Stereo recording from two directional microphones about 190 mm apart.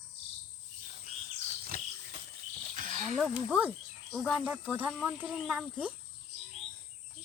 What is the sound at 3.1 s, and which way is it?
Speech, centre (ahead or behind).